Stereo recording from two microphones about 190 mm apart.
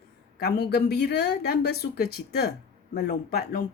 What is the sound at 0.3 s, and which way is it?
Speech, 55° left (ahead or behind).